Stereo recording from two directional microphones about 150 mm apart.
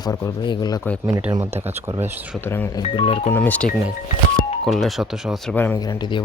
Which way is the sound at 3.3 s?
10° left (ahead or behind).